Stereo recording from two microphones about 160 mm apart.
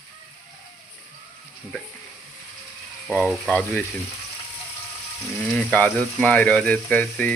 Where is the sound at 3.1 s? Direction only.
5° right (ahead or behind).